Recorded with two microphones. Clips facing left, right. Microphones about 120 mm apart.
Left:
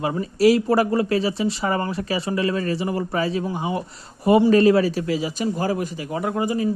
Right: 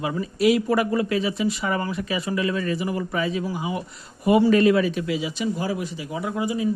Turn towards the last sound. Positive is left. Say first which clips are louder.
# left 3 dB
turn(degrees=50)  # may be behind; listen again after turning